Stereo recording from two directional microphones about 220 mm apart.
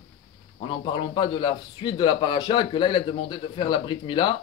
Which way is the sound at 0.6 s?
20° left (ahead or behind).